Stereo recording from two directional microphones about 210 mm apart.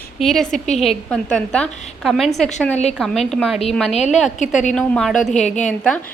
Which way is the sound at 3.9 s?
30° left (ahead or behind).